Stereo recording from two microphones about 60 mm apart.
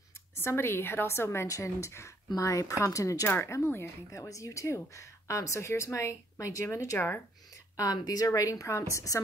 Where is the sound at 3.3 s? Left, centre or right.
Left.